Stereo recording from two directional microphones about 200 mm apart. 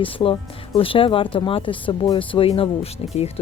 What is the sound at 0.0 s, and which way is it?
Speech, 25° left (ahead or behind).